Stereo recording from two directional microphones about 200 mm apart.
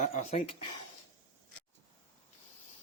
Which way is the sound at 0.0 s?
35° left (ahead or behind).